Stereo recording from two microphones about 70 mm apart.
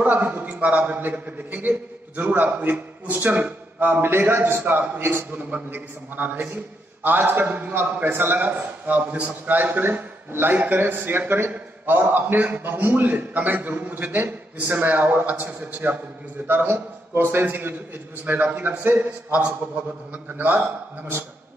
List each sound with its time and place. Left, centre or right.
0.0 s a man's voice: right